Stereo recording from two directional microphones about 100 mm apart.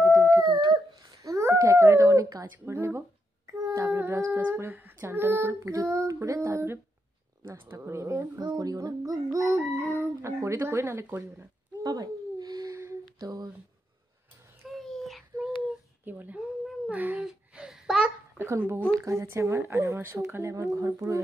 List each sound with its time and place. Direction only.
0.0 s dog: 30° right (ahead or behind)
2.5 s humming: 25° right (ahead or behind)
8.4 s child singing: 40° right (ahead or behind)
9.8 s humming: 30° right (ahead or behind)
11.8 s a sound: 40° right (ahead or behind)
14.7 s child singing: 5° left (ahead or behind)
16.1 s speech: 15° right (ahead or behind)
17.3 s babbling: 5° right (ahead or behind)
18.9 s humming: 30° right (ahead or behind)